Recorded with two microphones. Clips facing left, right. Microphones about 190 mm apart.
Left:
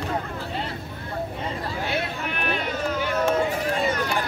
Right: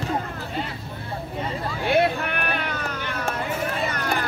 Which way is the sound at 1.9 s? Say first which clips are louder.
Right 7 dB; 60° right (ahead or behind).